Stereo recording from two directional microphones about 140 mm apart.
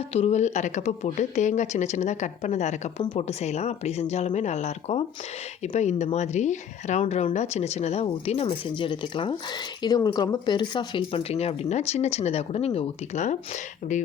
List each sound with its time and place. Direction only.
0.1 s a woman's voice: 50° left (ahead or behind)